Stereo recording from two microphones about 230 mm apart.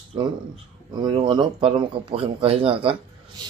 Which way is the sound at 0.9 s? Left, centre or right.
Centre.